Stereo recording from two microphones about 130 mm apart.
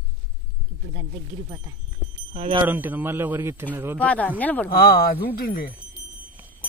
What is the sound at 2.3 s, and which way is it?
Speech, 45° right (ahead or behind).